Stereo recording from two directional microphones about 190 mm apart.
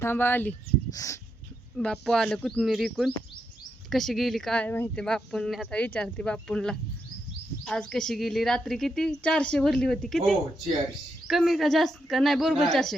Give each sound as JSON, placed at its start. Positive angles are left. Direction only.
{"t": 0.0, "sound": "speech", "side_deg": 10}
{"t": 1.7, "sound": "speech", "side_deg": 5}